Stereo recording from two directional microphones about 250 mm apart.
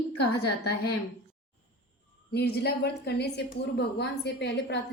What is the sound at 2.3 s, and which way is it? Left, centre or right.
A woman's voice, left.